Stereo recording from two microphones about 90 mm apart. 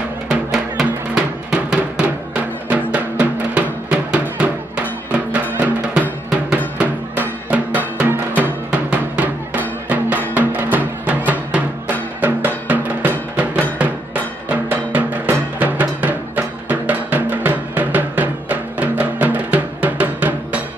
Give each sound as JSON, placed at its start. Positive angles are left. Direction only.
{"t": 0.3, "sound": "drum", "side_deg": -5}
{"t": 5.1, "sound": "music", "side_deg": -15}
{"t": 6.8, "sound": "drum", "side_deg": -15}
{"t": 8.4, "sound": "music", "side_deg": -15}